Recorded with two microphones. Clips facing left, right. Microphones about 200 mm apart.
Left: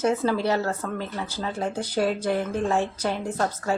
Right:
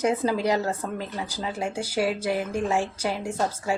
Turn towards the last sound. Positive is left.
turn(degrees=-10)  # may be behind; listen again after turning